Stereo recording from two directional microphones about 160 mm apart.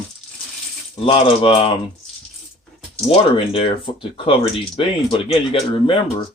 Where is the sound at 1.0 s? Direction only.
35° left (ahead or behind).